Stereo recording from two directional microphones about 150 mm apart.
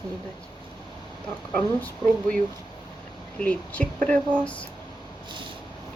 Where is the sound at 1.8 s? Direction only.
10° left (ahead or behind).